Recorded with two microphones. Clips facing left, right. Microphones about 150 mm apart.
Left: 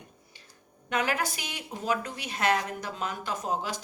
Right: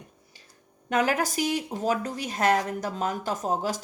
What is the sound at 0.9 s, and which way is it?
Speech, 40° right (ahead or behind).